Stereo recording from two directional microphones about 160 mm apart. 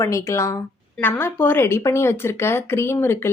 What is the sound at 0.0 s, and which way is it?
Speech, 15° left (ahead or behind).